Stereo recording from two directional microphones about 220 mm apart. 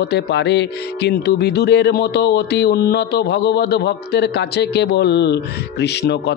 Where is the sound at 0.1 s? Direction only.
50° left (ahead or behind).